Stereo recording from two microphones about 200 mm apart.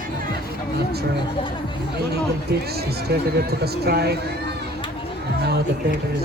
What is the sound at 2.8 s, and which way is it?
Speech, 50° right (ahead or behind).